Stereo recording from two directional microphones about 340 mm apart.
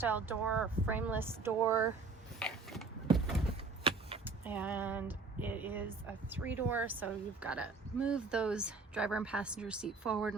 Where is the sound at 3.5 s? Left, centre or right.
Centre.